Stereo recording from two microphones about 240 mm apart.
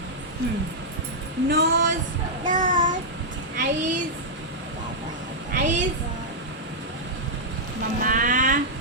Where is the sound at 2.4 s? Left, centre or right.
Right.